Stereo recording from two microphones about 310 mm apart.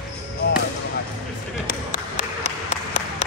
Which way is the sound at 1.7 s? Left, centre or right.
Left.